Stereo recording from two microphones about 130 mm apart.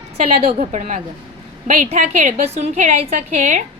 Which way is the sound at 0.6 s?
65° right (ahead or behind).